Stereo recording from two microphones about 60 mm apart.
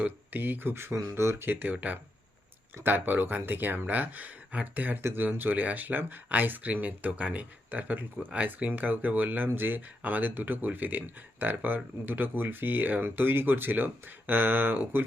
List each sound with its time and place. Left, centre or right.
0.0 s speech: right